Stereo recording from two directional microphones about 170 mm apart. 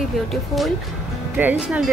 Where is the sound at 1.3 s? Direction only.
10° right (ahead or behind).